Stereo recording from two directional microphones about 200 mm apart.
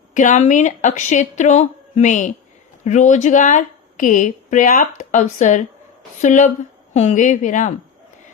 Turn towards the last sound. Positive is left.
turn(degrees=40)  # may be behind; listen again after turning